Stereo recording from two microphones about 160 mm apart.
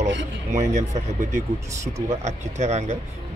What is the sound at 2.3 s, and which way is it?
Speech, 45° right (ahead or behind).